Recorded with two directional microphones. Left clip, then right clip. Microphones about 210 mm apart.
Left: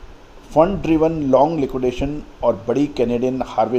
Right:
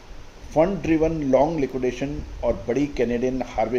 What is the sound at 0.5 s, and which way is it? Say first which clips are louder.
A man's voice: left 5 dB; 30° left (ahead or behind).